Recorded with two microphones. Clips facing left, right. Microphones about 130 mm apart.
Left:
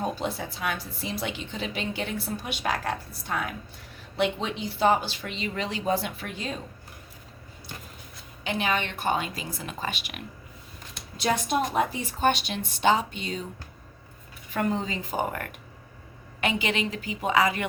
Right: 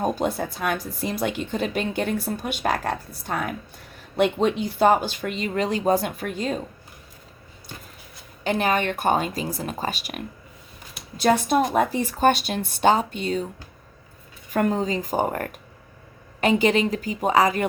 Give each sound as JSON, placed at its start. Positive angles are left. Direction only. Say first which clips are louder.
{"t": 0.0, "sound": "a woman's voice", "louder": "right 6 dB", "side_deg": -50}
{"t": 8.4, "sound": "a woman's voice", "louder": "right 6 dB", "side_deg": -45}
{"t": 14.5, "sound": "a woman's voice", "louder": "right 5 dB", "side_deg": -45}